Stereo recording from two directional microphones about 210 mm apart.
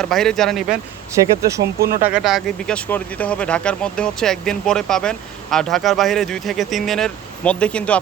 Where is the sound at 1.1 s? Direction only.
15° right (ahead or behind).